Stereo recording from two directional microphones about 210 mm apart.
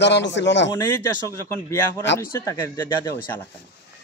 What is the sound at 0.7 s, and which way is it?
Speech, 15° left (ahead or behind).